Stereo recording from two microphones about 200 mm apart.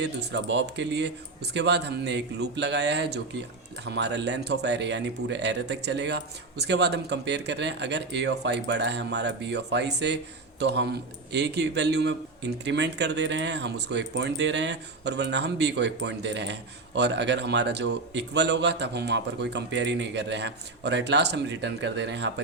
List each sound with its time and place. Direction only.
0.0 s a man's voice: 60° right (ahead or behind)